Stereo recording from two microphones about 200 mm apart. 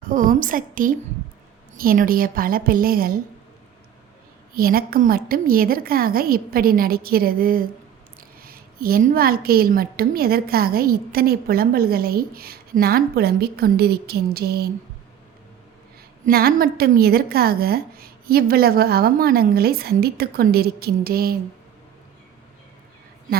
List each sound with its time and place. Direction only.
0.1 s a woman's voice: 45° right (ahead or behind)
4.5 s a woman's voice: 50° right (ahead or behind)
16.2 s a woman's voice: 50° right (ahead or behind)